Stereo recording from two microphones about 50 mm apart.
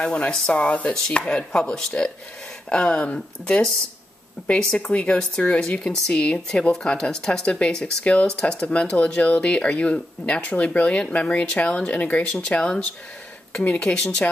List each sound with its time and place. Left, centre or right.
0.0 s speech: left